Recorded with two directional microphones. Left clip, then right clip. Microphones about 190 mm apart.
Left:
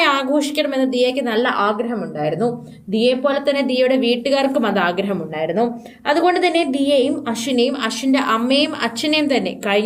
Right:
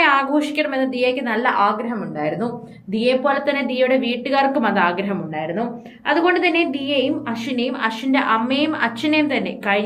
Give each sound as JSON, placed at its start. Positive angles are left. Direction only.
{"t": 0.0, "sound": "a woman's voice", "side_deg": 50}